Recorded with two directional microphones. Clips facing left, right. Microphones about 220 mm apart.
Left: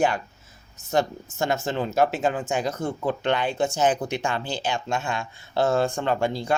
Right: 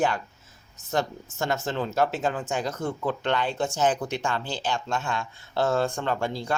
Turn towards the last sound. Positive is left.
turn(degrees=15)  # may be behind; listen again after turning